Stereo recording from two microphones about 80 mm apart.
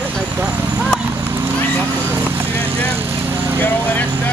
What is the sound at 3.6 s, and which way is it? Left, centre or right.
Speech, left.